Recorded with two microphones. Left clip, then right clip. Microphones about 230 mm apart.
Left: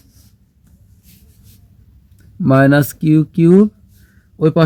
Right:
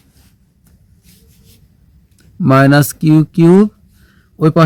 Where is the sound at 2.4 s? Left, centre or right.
Right.